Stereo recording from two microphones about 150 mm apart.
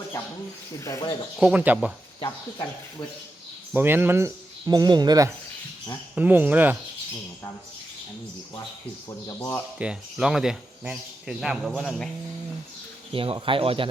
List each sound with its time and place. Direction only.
0.9 s speech: 20° left (ahead or behind)
1.4 s speech: 5° right (ahead or behind)
3.8 s speech: 15° right (ahead or behind)
6.1 s speech: 10° right (ahead or behind)
9.0 s speech: 25° left (ahead or behind)
9.7 s speech: 5° right (ahead or behind)
13.1 s speech: 35° right (ahead or behind)